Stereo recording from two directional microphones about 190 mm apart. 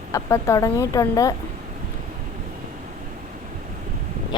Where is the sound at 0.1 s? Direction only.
15° left (ahead or behind).